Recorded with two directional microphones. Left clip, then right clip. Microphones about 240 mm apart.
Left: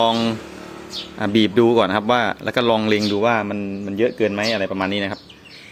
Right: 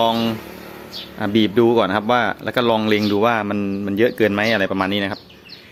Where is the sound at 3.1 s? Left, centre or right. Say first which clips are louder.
Right 1 dB; centre.